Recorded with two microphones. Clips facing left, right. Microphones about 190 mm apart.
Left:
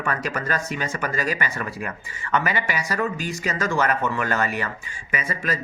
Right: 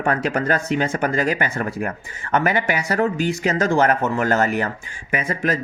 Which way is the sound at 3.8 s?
45° right (ahead or behind).